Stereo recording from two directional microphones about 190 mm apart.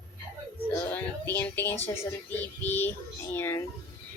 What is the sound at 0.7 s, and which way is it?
Music, 10° left (ahead or behind).